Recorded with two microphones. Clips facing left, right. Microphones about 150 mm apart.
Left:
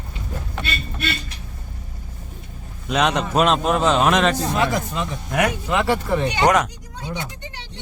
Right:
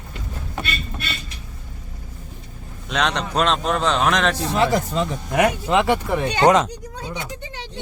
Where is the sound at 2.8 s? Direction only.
5° left (ahead or behind).